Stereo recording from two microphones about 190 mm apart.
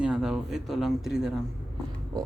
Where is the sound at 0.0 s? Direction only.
5° right (ahead or behind).